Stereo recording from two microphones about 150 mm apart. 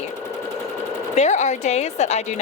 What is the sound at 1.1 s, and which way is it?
Speech, 50° left (ahead or behind).